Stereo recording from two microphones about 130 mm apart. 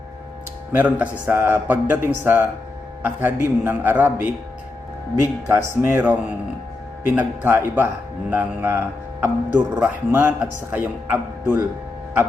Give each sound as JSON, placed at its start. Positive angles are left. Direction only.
{"t": 0.7, "sound": "a man's voice", "side_deg": -15}
{"t": 7.2, "sound": "a man's voice", "side_deg": -15}